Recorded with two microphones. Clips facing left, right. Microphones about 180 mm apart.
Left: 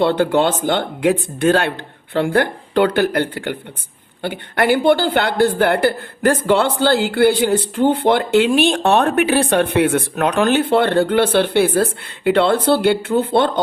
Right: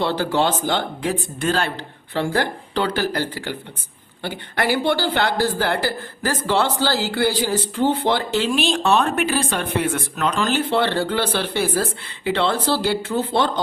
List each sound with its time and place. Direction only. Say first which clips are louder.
0.0 s speech: left 5 dB; 60° left (ahead or behind)